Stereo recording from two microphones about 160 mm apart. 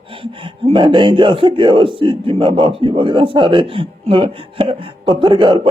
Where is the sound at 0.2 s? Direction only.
35° right (ahead or behind).